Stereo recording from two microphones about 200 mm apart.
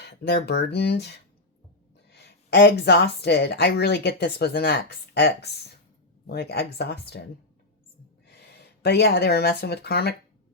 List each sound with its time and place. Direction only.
0.0 s speech: 55° left (ahead or behind)
8.3 s speech: 55° left (ahead or behind)